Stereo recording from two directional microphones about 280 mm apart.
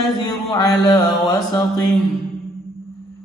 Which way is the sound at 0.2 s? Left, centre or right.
Centre.